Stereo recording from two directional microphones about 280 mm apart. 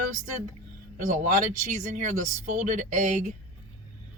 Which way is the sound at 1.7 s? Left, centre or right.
Right.